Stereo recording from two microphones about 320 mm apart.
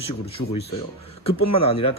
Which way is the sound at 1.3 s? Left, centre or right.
Centre.